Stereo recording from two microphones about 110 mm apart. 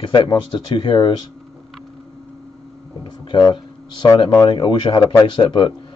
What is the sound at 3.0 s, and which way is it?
A man's voice, 45° left (ahead or behind).